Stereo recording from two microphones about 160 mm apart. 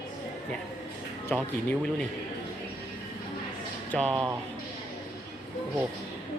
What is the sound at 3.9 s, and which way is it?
Speech, 5° left (ahead or behind).